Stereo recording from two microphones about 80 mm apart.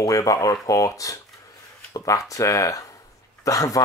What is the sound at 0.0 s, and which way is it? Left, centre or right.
Speech, left.